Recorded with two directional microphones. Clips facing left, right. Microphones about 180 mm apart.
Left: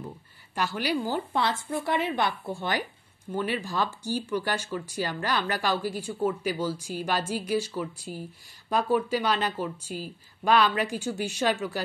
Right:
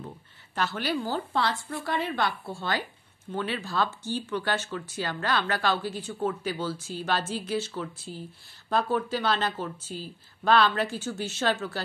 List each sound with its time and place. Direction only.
0.6 s a woman's voice: 10° left (ahead or behind)